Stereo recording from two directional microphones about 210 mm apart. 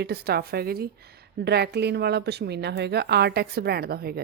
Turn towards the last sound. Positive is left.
turn(degrees=-50)  # may be behind; listen again after turning